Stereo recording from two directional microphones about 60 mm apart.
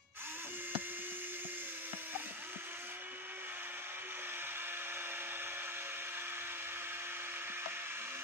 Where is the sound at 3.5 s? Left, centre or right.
Right.